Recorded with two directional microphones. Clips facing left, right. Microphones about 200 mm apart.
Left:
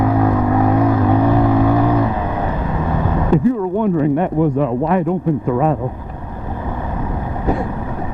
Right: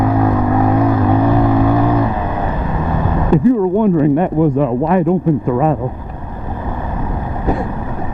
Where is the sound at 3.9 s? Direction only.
15° right (ahead or behind).